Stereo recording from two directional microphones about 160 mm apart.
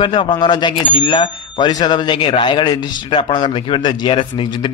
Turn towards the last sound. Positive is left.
turn(degrees=30)  # may be behind; listen again after turning